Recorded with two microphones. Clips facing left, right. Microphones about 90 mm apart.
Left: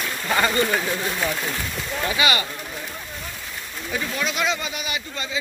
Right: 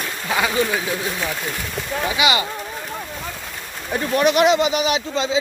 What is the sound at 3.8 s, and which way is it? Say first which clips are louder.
Speech: right 9 dB; 55° right (ahead or behind).